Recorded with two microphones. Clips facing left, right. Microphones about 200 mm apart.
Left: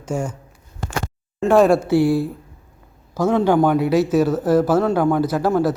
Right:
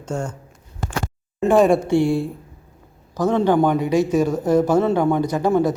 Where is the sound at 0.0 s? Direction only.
10° left (ahead or behind).